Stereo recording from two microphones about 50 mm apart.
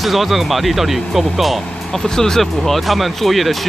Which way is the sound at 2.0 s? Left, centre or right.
Centre.